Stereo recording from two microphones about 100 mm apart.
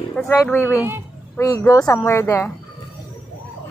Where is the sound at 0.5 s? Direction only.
25° left (ahead or behind).